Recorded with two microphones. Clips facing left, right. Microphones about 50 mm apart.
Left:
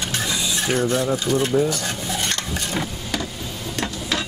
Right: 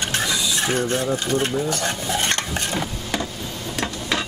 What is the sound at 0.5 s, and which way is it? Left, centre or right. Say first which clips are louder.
Speech: left 3 dB; right.